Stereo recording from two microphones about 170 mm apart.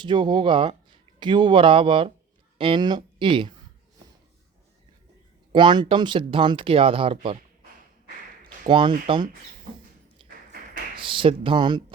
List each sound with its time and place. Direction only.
0.0 s speech: 25° right (ahead or behind)
5.5 s speech: 25° right (ahead or behind)
8.6 s speech: 30° right (ahead or behind)
10.2 s a sound: 30° right (ahead or behind)
10.9 s speech: 30° right (ahead or behind)